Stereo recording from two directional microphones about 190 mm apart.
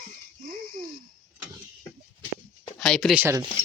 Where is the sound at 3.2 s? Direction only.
15° right (ahead or behind).